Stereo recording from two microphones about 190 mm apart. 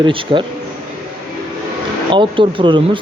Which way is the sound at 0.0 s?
25° right (ahead or behind).